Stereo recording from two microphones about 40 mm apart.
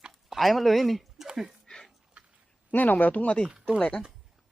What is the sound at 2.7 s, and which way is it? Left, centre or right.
Speech, left.